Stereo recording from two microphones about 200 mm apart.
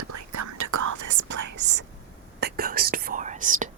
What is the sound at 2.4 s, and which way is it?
Whispering, 45° right (ahead or behind).